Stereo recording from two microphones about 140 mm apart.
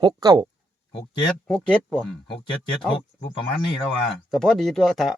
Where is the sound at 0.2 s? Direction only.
25° right (ahead or behind).